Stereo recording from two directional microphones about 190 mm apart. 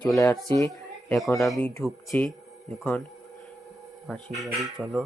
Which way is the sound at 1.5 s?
5° left (ahead or behind).